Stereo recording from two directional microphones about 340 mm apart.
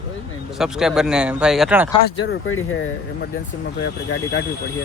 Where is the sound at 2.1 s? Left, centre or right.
Left.